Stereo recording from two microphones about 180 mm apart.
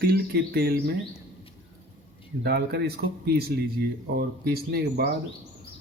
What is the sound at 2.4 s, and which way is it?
Speech, 60° right (ahead or behind).